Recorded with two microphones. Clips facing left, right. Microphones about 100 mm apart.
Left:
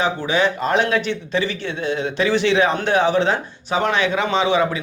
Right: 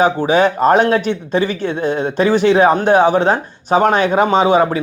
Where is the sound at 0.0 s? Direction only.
50° right (ahead or behind).